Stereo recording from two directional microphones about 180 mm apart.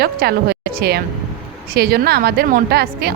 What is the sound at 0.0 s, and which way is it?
A woman's voice, 60° right (ahead or behind).